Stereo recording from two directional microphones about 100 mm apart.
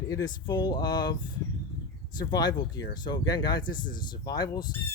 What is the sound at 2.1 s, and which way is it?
Speech, 45° left (ahead or behind).